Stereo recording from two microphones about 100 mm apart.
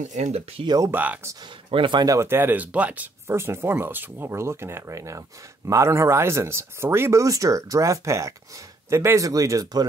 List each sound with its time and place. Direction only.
0.7 s speech: 35° right (ahead or behind)
0.9 s speech: 15° right (ahead or behind)
1.7 s speech: 55° right (ahead or behind)
2.0 s speech: 25° right (ahead or behind)